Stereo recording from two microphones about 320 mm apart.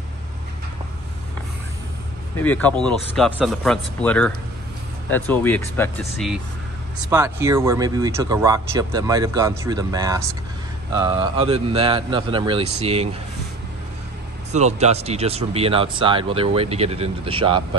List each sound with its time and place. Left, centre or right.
2.3 s speech: centre
14.5 s speech: right